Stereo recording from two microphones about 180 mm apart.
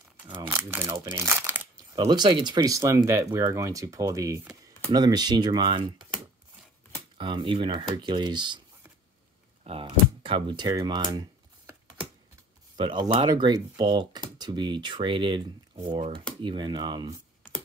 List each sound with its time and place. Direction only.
0.5 s speech: 15° right (ahead or behind)
2.0 s speech: 25° right (ahead or behind)
7.2 s speech: 30° right (ahead or behind)
9.7 s speech: 30° right (ahead or behind)
12.7 s speech: 25° right (ahead or behind)